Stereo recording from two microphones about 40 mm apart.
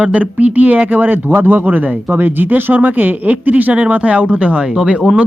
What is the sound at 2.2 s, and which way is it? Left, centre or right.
Speech, right.